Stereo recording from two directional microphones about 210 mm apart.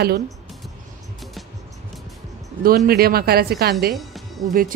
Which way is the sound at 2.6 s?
45° right (ahead or behind).